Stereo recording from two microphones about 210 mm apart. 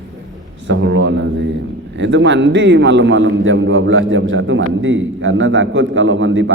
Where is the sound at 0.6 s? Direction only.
60° right (ahead or behind).